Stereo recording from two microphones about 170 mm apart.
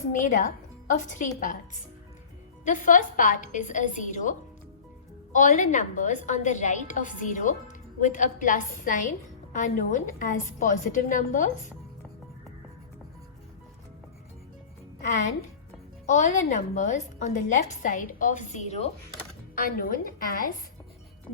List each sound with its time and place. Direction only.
0.1 s a woman's voice: 50° left (ahead or behind)
16.0 s a woman's voice: 45° left (ahead or behind)
19.5 s a woman's voice: 55° left (ahead or behind)